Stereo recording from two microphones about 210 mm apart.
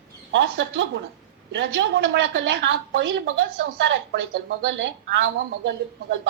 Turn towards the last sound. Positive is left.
turn(degrees=-60)  # may be behind; listen again after turning